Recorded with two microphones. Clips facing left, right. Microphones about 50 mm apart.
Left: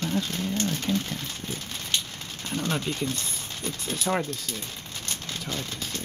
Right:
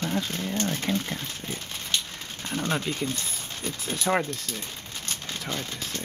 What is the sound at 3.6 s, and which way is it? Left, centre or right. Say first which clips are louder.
Speech: even; centre.